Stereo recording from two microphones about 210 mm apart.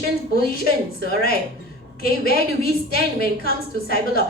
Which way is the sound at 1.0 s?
45° left (ahead or behind).